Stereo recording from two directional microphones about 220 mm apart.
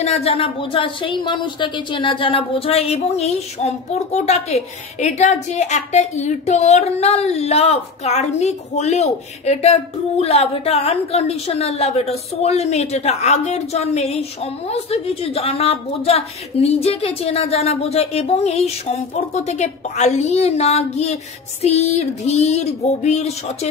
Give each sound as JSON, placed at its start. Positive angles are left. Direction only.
{"t": 0.0, "sound": "a woman's voice", "side_deg": 25}